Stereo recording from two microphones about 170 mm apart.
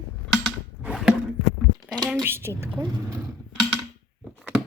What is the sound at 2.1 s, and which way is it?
A woman's voice, 15° right (ahead or behind).